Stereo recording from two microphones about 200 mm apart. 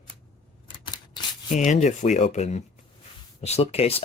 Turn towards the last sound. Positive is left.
turn(degrees=30)  # may be behind; listen again after turning